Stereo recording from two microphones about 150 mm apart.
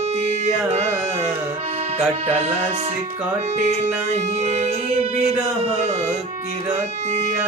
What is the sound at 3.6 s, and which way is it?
Music, 50° right (ahead or behind).